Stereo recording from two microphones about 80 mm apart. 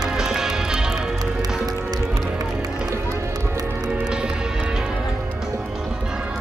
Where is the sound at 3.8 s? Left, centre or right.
Centre.